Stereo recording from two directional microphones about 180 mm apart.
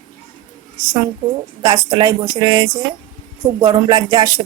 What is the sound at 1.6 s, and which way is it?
Music, 20° right (ahead or behind).